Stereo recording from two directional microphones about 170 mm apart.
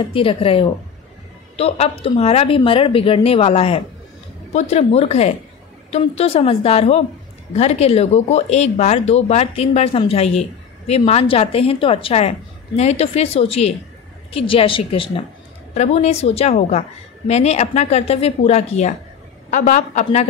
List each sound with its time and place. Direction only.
0.0 s a woman's voice: 30° left (ahead or behind)